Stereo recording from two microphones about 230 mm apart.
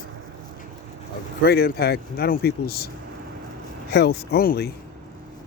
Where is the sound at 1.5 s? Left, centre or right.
Left.